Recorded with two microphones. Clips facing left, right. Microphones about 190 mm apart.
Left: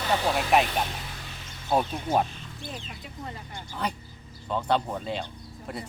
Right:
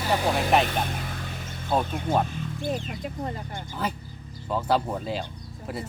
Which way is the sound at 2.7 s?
45° right (ahead or behind).